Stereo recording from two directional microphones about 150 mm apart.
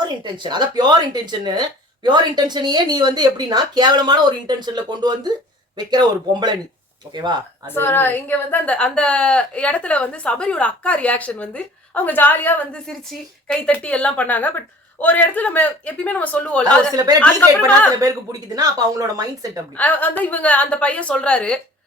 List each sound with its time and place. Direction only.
0.3 s speech: 30° right (ahead or behind)
7.7 s a woman's voice: 15° left (ahead or behind)
16.9 s speech: 25° right (ahead or behind)
19.7 s a woman's voice: 10° left (ahead or behind)